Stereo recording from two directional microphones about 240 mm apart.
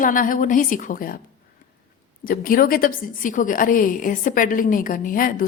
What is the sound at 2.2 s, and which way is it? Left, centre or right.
A woman's voice, left.